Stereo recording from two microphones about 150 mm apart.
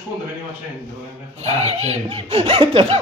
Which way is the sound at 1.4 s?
45° right (ahead or behind).